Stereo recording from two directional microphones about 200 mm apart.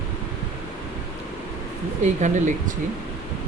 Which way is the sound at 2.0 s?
35° right (ahead or behind).